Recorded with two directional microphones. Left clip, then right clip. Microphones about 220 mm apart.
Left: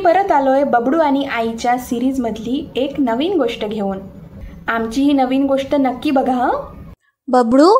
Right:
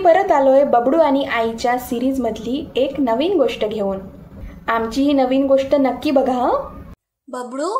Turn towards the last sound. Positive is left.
turn(degrees=45)  # may be behind; listen again after turning